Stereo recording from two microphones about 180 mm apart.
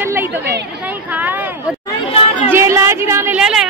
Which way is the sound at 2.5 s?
15° right (ahead or behind).